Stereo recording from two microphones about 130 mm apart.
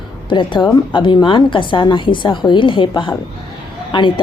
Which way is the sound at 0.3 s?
40° left (ahead or behind).